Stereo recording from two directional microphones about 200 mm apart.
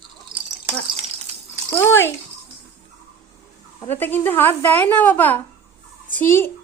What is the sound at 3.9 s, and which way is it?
A woman's voice, 10° left (ahead or behind).